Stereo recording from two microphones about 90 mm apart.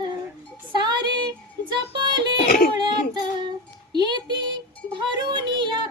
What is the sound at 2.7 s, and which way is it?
Child singing, 55° right (ahead or behind).